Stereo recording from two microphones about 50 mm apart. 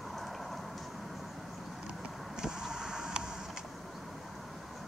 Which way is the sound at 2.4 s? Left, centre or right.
Centre.